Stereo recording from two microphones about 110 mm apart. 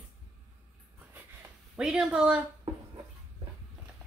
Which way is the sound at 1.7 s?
5° right (ahead or behind).